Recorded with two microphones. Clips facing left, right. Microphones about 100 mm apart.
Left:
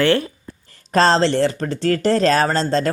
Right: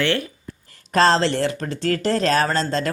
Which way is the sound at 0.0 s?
35° left (ahead or behind).